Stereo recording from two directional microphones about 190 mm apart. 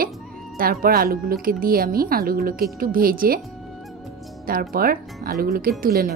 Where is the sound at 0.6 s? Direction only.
50° right (ahead or behind).